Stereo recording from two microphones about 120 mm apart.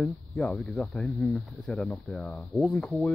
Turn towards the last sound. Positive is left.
turn(degrees=0)  # may be behind; listen again after turning